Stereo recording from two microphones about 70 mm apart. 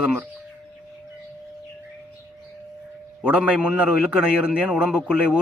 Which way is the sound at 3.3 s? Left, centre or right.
Centre.